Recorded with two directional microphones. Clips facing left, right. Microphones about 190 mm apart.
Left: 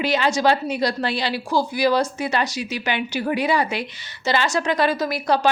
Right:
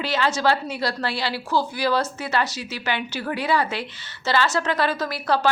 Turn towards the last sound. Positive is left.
turn(degrees=15)  # may be behind; listen again after turning